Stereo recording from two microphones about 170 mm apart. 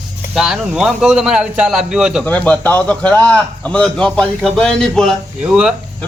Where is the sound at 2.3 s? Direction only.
10° left (ahead or behind).